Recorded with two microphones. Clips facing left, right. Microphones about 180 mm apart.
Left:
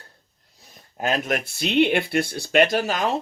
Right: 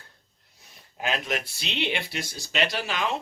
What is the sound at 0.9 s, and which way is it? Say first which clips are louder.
Speech: left 5 dB; 45° left (ahead or behind).